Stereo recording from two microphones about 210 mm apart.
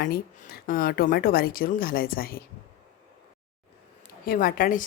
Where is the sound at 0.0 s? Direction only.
45° left (ahead or behind).